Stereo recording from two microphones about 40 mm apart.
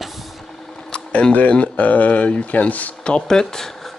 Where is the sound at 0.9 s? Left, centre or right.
Left.